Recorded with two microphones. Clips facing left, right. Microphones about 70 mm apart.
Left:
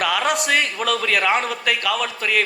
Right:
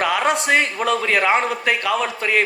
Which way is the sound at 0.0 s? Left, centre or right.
Right.